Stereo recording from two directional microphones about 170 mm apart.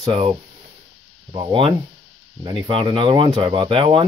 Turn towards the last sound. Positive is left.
turn(degrees=-30)  # may be behind; listen again after turning